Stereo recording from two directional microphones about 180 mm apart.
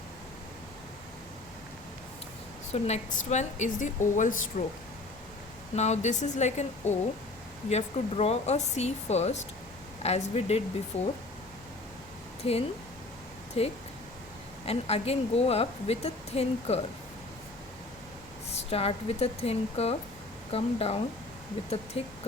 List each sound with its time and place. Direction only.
2.7 s a woman's voice: 40° left (ahead or behind)
5.7 s a woman's voice: 40° left (ahead or behind)
12.4 s a woman's voice: 30° left (ahead or behind)
18.5 s a woman's voice: 35° left (ahead or behind)